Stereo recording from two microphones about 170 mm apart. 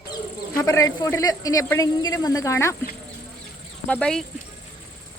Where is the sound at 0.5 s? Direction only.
20° left (ahead or behind).